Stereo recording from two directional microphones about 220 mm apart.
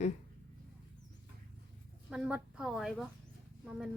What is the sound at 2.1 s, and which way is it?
A woman's voice, 5° right (ahead or behind).